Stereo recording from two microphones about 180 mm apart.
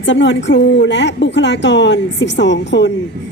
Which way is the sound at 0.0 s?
90° left.